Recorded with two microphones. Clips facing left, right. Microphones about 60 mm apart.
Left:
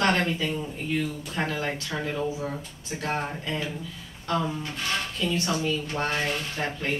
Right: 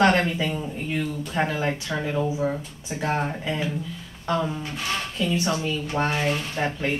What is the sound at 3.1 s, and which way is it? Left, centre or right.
Speech, centre.